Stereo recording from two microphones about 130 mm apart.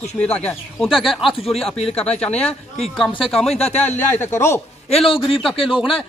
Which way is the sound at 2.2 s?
10° left (ahead or behind).